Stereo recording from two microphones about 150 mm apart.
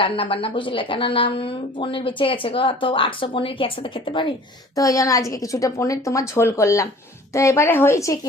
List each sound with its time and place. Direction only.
0.0 s speech: 35° left (ahead or behind)
4.7 s a woman's voice: 20° left (ahead or behind)